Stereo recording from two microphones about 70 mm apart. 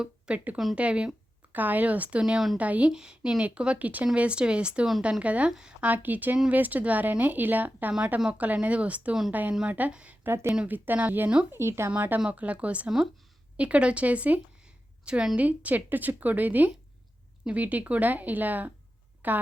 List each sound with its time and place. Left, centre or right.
0.0 s a woman's voice: centre
0.5 s speech: centre
0.8 s speech: centre
2.6 s speech: right
5.5 s speech: centre
5.8 s speech: right
7.9 s a woman's voice: centre
10.2 s speech: right
10.7 s speech: right
11.5 s speech: right
11.9 s a woman's voice: right